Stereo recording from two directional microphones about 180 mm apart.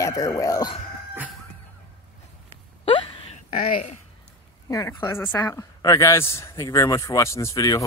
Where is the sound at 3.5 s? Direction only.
55° left (ahead or behind).